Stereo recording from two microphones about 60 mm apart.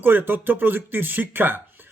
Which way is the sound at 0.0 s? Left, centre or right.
Right.